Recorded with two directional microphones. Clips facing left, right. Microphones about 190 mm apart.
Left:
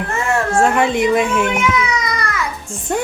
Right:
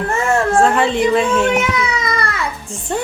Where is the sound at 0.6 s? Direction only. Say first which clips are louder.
Right 1 dB; 10° left (ahead or behind).